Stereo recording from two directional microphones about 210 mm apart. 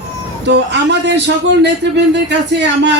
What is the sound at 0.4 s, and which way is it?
A man's voice, 55° right (ahead or behind).